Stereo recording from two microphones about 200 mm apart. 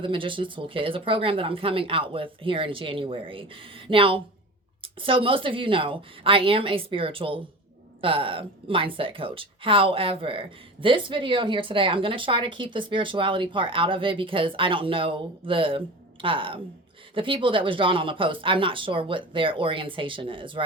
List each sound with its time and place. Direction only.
0.0 s a woman's voice: 25° right (ahead or behind)